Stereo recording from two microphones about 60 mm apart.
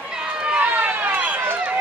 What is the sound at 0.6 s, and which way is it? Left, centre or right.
Run, right.